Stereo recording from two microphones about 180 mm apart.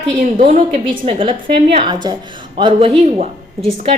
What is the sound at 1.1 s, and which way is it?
A woman's voice, 30° right (ahead or behind).